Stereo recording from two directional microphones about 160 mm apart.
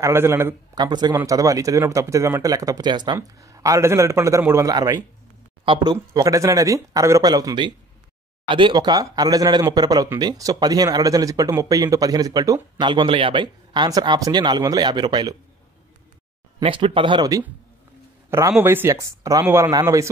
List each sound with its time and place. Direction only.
0.0 s a man's voice: 15° right (ahead or behind)
0.8 s speech: 25° right (ahead or behind)
16.5 s speech: 35° right (ahead or behind)
18.6 s speech: 15° right (ahead or behind)